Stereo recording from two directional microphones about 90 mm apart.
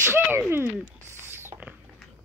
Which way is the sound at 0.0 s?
25° right (ahead or behind).